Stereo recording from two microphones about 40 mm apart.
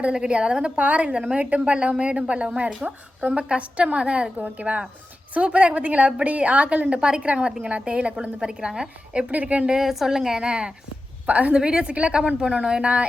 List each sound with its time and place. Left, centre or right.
0.1 s a woman's voice: right
4.4 s a woman's voice: right
4.6 s a woman's voice: right
9.3 s speech: right
9.6 s a woman's voice: centre
11.3 s speech: right
11.5 s a woman's voice: right
12.8 s speech: right